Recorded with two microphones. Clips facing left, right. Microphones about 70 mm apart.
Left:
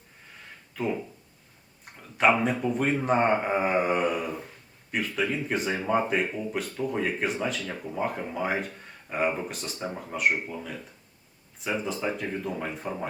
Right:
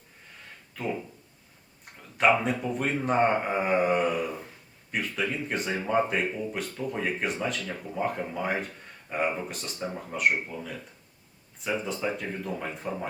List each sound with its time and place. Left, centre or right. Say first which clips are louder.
0.8 s speech: left 3 dB; centre